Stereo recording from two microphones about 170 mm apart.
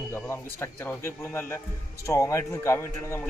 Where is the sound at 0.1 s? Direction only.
15° left (ahead or behind).